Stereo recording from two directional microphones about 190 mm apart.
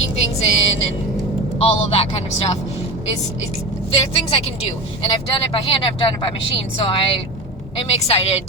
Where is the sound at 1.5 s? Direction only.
30° left (ahead or behind).